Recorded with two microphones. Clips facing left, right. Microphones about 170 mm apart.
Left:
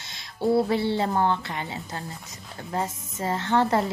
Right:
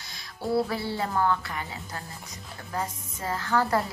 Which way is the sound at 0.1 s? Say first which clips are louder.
Left 5 dB; 25° left (ahead or behind).